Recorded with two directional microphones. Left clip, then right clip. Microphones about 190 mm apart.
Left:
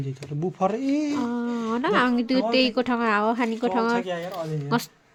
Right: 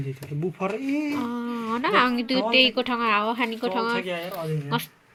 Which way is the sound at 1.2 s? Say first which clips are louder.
Left 2 dB; 25° left (ahead or behind).